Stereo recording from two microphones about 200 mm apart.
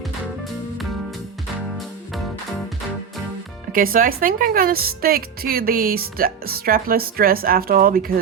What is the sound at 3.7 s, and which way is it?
Speech, 45° right (ahead or behind).